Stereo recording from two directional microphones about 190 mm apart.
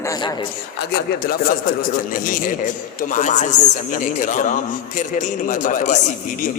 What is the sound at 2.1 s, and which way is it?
A man's voice, 45° left (ahead or behind).